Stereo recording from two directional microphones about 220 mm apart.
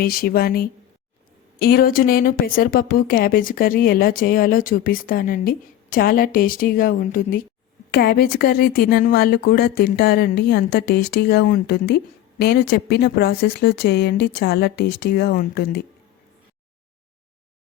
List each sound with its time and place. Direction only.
0.0 s speech: 45° left (ahead or behind)